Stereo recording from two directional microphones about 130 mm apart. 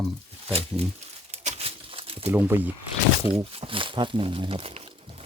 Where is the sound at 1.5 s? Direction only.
50° right (ahead or behind).